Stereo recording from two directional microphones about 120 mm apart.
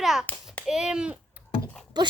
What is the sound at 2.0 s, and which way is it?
Speech, 35° right (ahead or behind).